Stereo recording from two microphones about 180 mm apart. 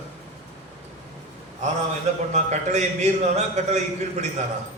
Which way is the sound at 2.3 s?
40° right (ahead or behind).